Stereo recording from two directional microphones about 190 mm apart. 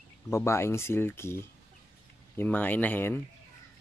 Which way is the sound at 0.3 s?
15° left (ahead or behind).